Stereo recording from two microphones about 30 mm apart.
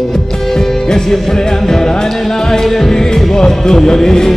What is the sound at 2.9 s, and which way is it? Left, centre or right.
Music, centre.